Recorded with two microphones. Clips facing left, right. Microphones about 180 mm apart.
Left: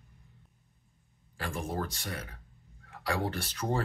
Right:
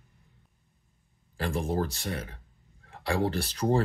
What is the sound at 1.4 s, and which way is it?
Speech, 30° right (ahead or behind).